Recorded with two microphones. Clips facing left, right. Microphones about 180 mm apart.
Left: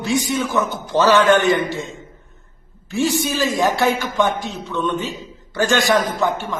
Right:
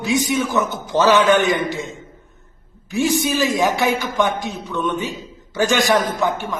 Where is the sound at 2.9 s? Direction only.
15° right (ahead or behind).